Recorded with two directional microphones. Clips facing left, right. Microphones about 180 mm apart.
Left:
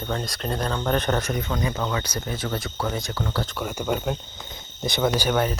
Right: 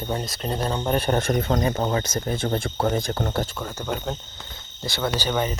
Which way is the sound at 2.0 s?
45° right (ahead or behind).